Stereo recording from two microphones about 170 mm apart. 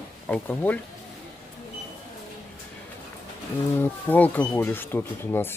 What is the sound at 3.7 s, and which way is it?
Speech, 10° left (ahead or behind).